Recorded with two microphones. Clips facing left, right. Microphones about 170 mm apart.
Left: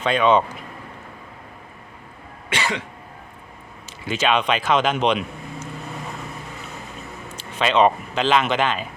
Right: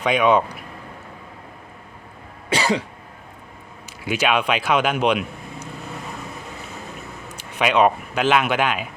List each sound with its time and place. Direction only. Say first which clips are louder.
0.0 s speech: even; 10° right (ahead or behind)
2.5 s cough: right 5 dB; 35° right (ahead or behind)
4.0 s speech: even; 10° right (ahead or behind)
7.3 s speech: even; 10° right (ahead or behind)